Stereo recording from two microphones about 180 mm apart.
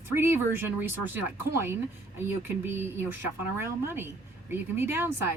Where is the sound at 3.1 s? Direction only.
15° right (ahead or behind).